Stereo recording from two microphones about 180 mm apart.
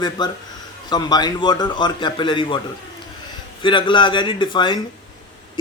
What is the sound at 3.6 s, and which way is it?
Speech, 25° left (ahead or behind).